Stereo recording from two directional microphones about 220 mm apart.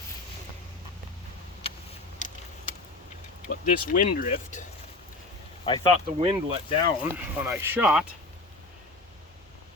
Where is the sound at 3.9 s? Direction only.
40° left (ahead or behind).